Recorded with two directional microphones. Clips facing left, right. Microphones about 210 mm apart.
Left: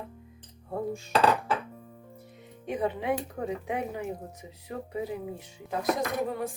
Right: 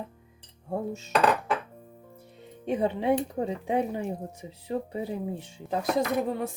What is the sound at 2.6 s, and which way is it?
A woman's voice, 30° right (ahead or behind).